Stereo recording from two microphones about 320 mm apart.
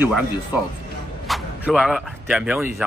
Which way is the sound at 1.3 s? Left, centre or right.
Centre.